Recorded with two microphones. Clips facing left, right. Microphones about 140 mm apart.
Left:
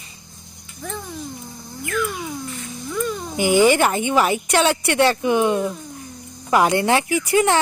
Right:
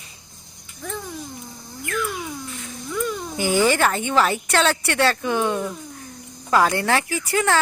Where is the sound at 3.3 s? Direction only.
15° left (ahead or behind).